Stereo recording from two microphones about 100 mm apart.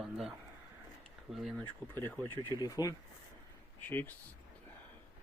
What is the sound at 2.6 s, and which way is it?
Speech, 35° left (ahead or behind).